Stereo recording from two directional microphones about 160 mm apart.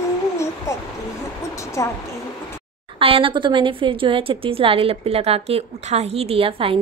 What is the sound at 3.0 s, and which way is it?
A woman's voice, 35° right (ahead or behind).